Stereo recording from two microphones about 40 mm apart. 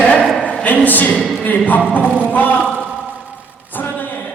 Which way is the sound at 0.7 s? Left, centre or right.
Left.